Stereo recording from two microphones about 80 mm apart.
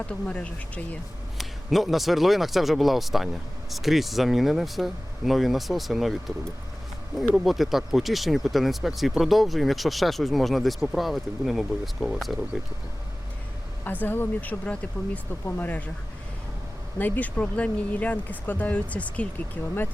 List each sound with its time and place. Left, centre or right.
0.0 s speech: centre
1.4 s speech: centre
13.8 s speech: left
17.0 s speech: centre